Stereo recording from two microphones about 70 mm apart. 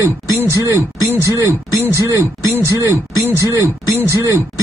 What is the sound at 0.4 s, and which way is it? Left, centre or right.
Speech, right.